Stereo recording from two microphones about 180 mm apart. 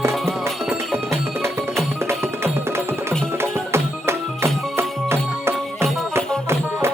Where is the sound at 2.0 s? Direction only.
15° right (ahead or behind).